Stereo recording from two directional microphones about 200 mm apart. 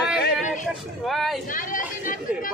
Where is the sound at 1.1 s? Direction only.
Centre (ahead or behind).